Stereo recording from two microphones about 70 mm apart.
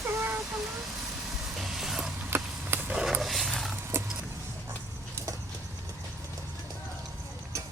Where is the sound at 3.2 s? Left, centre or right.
Centre.